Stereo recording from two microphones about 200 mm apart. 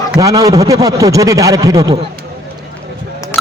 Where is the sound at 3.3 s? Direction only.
10° left (ahead or behind).